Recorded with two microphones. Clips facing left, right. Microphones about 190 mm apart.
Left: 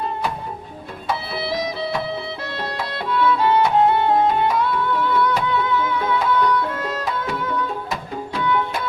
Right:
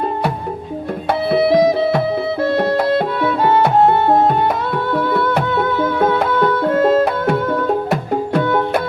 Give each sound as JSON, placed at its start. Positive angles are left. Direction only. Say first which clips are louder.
{"t": 1.3, "sound": "music", "louder": "right 18 dB", "side_deg": -55}